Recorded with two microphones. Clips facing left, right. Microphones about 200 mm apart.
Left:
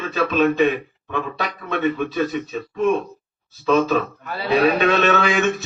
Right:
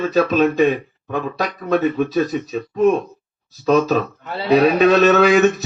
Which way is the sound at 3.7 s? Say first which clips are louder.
Right 2 dB; 40° right (ahead or behind).